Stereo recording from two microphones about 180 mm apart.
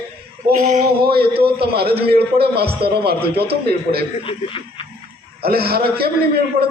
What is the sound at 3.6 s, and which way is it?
Speech, 60° right (ahead or behind).